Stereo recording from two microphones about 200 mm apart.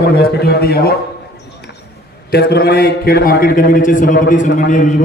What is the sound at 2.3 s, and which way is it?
A man's voice, 55° left (ahead or behind).